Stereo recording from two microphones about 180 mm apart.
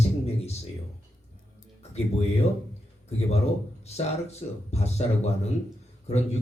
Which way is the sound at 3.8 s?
35° left (ahead or behind).